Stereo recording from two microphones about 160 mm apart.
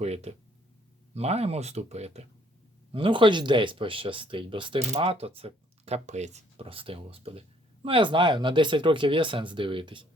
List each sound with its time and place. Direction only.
0.0 s speech: 40° right (ahead or behind)